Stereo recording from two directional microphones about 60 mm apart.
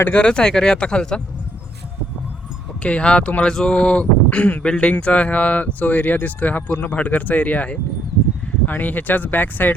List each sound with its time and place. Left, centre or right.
0.1 s speech: centre
2.8 s speech: centre